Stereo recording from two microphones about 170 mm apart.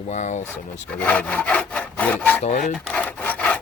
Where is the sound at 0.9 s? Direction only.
10° left (ahead or behind).